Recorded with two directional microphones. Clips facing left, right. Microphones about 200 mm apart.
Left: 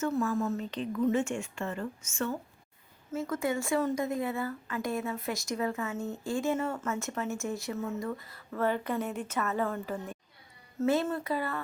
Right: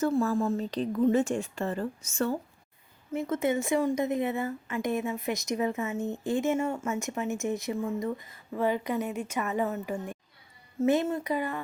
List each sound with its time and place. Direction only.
0.0 s a woman's voice: 35° right (ahead or behind)
3.1 s a woman's voice: 20° right (ahead or behind)